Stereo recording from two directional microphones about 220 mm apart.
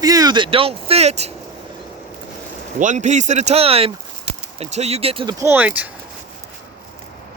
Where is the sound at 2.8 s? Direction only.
35° right (ahead or behind); by 5.9 s 5° right (ahead or behind).